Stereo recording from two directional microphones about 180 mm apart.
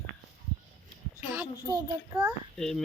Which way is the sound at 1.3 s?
20° right (ahead or behind).